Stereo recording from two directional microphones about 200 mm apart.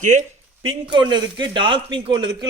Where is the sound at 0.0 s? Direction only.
35° right (ahead or behind).